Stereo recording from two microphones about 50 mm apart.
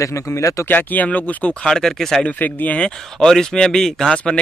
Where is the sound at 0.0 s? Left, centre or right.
Left.